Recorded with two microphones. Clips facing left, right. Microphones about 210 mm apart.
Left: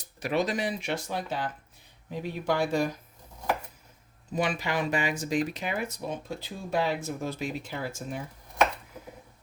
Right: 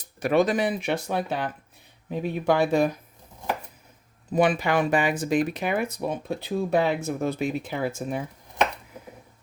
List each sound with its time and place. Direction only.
0.2 s speech: 50° right (ahead or behind)
4.3 s speech: 55° right (ahead or behind)